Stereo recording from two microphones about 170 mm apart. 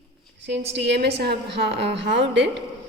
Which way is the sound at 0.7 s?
85° right.